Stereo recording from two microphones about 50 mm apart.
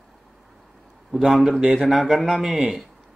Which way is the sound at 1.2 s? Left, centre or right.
Centre.